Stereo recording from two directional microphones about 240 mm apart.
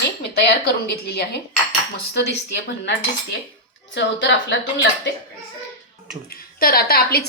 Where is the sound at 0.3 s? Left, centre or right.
Left.